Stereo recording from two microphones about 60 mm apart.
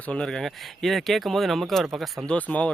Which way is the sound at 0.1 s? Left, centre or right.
Centre.